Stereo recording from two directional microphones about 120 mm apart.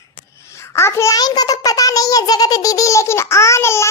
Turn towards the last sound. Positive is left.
turn(degrees=20)  # may be behind; listen again after turning